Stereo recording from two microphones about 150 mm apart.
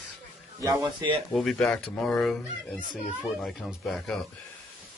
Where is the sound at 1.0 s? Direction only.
25° right (ahead or behind).